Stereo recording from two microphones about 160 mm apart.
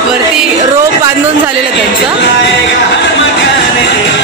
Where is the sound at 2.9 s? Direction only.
90° left.